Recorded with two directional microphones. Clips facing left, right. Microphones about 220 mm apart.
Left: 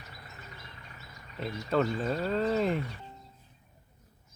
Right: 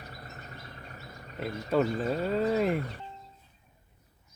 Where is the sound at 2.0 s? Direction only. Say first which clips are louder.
Right 1 dB; 10° right (ahead or behind).